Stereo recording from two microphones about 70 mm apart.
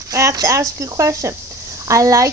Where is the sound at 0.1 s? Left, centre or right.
Right.